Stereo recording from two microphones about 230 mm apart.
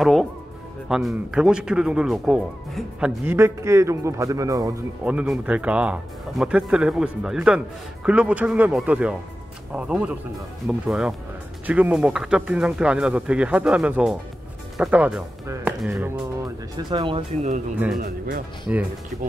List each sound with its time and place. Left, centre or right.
0.0 s speech: centre
16.7 s speech: right
17.9 s speech: right